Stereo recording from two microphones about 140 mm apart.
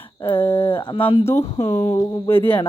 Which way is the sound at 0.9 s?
40° left (ahead or behind).